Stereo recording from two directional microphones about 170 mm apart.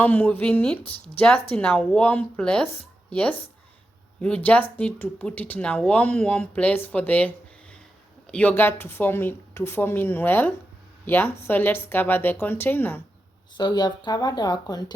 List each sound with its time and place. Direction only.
0.0 s speech: 10° left (ahead or behind)
13.6 s speech: 25° left (ahead or behind)